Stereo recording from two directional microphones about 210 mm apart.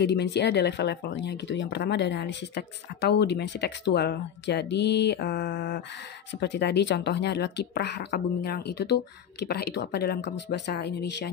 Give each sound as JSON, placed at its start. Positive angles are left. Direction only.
{"t": 0.0, "sound": "speech", "side_deg": 55}